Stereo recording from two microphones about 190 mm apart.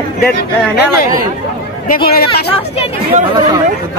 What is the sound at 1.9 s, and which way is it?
Speech, 55° left (ahead or behind).